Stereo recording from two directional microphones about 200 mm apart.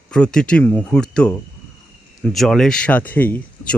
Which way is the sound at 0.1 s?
5° left (ahead or behind).